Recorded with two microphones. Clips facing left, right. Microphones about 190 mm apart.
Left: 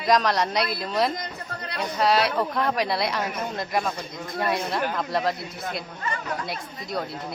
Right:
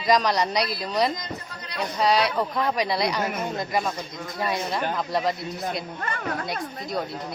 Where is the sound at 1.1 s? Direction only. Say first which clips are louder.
Left 1 dB; 55° left (ahead or behind).